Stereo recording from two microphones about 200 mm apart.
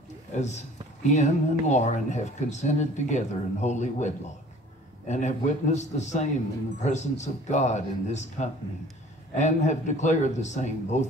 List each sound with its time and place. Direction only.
0.3 s speech: 35° left (ahead or behind)